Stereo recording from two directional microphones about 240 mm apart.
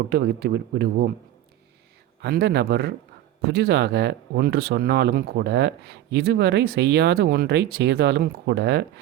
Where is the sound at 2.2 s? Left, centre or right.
Right.